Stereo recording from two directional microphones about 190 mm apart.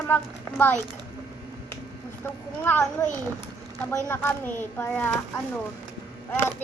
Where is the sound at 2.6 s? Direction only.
10° left (ahead or behind).